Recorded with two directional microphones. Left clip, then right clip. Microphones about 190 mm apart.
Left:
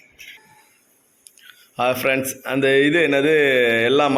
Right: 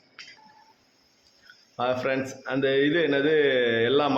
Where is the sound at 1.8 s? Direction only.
20° left (ahead or behind).